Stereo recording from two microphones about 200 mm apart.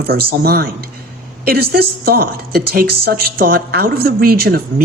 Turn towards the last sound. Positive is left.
turn(degrees=-50)  # may be behind; listen again after turning